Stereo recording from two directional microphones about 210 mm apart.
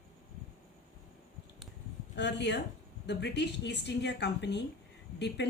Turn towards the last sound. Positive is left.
turn(degrees=55)  # may be behind; listen again after turning